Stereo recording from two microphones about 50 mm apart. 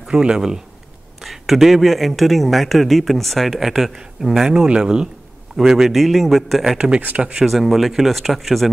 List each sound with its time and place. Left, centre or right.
0.0 s speech: centre
1.2 s a man's voice: centre
5.6 s a man's voice: centre
7.0 s speech: right
7.4 s a man's voice: centre